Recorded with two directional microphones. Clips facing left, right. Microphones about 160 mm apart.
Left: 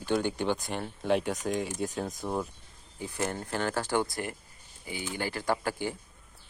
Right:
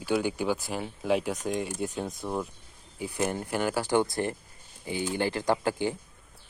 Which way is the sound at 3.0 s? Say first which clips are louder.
Right 3 dB; 15° right (ahead or behind).